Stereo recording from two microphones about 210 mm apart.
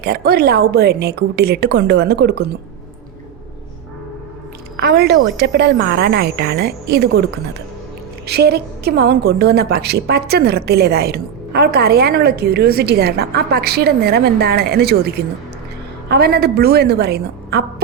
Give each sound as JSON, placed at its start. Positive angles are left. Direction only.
{"t": 0.0, "sound": "a woman's voice", "side_deg": -45}
{"t": 4.8, "sound": "a woman's voice", "side_deg": -50}
{"t": 8.3, "sound": "a woman's voice", "side_deg": -50}